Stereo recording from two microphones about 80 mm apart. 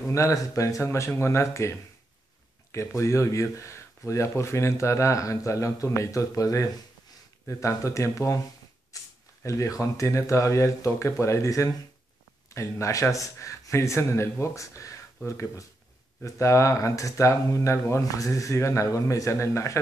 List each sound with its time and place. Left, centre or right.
0.1 s speech: left
8.9 s a sound: left
9.4 s speech: left